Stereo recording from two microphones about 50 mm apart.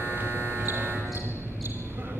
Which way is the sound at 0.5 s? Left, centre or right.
Right.